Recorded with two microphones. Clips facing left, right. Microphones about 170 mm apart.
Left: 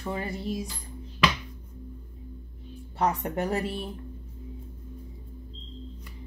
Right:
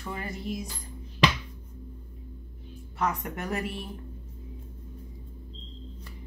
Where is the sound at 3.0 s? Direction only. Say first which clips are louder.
Left 4 dB; 35° left (ahead or behind).